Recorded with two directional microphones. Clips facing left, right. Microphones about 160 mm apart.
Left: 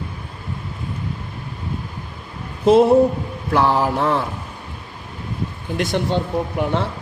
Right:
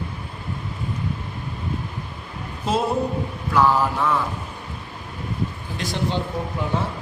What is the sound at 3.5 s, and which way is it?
Mantra, 60° left (ahead or behind).